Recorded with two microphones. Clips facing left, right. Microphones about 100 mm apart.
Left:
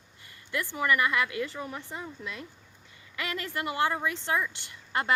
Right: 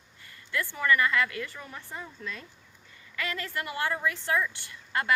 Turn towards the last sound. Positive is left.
turn(degrees=20)  # may be behind; listen again after turning